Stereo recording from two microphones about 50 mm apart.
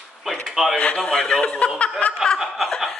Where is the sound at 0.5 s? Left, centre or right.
Centre.